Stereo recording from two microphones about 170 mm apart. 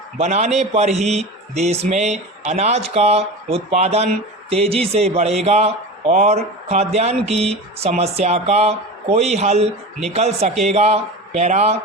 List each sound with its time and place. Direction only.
0.2 s a man's voice: 40° right (ahead or behind)